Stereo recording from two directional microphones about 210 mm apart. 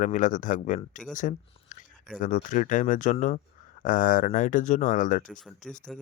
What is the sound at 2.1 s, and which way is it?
Speech, 40° left (ahead or behind).